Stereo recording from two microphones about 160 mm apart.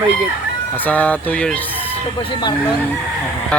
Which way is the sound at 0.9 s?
10° left (ahead or behind).